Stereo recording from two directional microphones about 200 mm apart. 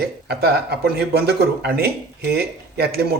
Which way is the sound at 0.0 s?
55° right (ahead or behind).